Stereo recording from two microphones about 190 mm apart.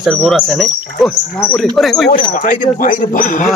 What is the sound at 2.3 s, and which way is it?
Speech, 45° left (ahead or behind).